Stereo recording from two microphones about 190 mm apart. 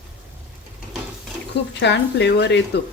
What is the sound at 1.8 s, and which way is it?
Speech, 65° left (ahead or behind).